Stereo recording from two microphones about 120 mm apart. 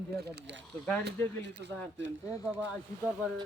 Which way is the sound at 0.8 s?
15° left (ahead or behind).